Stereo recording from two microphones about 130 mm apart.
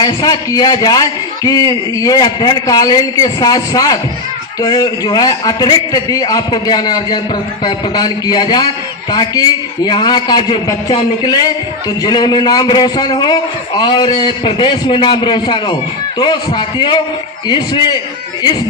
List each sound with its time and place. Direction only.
0.0 s a man's voice: 30° left (ahead or behind)